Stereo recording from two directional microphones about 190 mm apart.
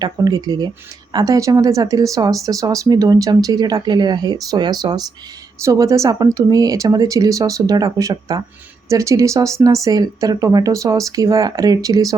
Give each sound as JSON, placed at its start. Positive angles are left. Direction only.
{"t": 0.0, "sound": "speech", "side_deg": -20}